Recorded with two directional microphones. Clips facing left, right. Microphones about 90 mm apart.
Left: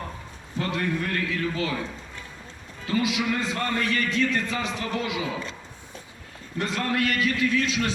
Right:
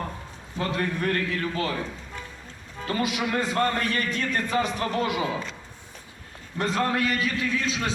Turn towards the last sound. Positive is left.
turn(degrees=-30)  # may be behind; listen again after turning